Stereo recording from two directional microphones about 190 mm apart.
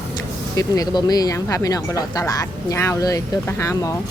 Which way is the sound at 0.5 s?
20° left (ahead or behind).